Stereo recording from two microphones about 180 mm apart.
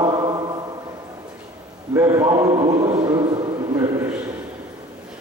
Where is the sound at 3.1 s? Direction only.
20° right (ahead or behind).